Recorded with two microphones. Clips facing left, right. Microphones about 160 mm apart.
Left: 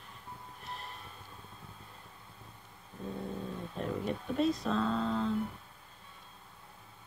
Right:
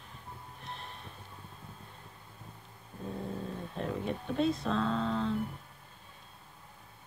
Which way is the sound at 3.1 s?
Centre (ahead or behind).